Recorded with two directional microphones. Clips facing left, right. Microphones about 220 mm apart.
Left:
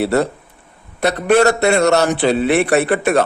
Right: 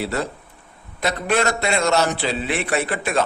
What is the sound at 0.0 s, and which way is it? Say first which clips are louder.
Speech: left 9 dB; 70° left (ahead or behind).